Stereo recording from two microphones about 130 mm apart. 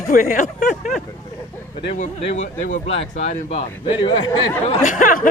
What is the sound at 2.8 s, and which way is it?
Speech, 60° left (ahead or behind).